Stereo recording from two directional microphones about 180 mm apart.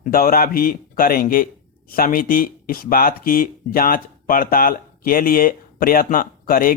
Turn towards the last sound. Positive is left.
turn(degrees=55)  # may be behind; listen again after turning